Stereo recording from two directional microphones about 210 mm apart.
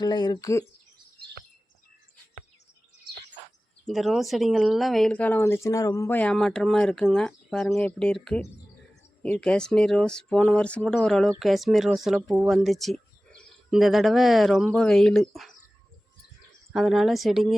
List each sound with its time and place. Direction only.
0.0 s speech: 20° left (ahead or behind)
3.8 s speech: centre (ahead or behind)
16.7 s speech: centre (ahead or behind)